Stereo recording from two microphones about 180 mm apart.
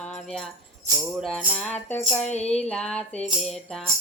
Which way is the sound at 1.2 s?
Centre (ahead or behind).